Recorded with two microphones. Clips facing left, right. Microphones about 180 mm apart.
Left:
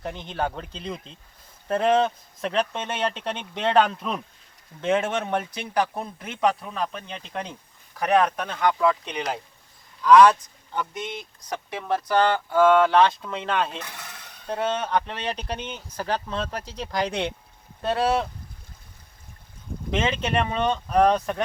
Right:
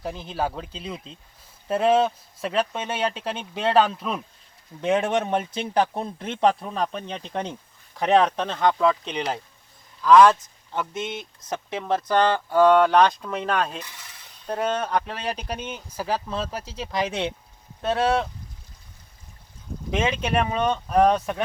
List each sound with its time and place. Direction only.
0.0 s speech: 5° right (ahead or behind)
4.8 s speech: 15° right (ahead or behind)
10.0 s speech: centre (ahead or behind)
11.2 s speech: 20° right (ahead or behind)
13.8 s a sound: 65° left (ahead or behind)
14.4 s speech: 10° right (ahead or behind)
19.9 s speech: 10° right (ahead or behind)